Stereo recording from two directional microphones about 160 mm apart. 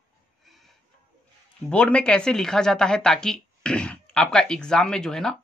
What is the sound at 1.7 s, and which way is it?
Speech, 5° left (ahead or behind).